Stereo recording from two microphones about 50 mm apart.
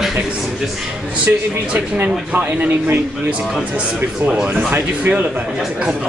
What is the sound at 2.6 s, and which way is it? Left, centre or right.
Speech, right.